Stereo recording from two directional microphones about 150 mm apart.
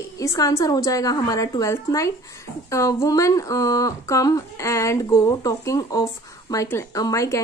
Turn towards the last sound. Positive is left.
turn(degrees=20)  # may be behind; listen again after turning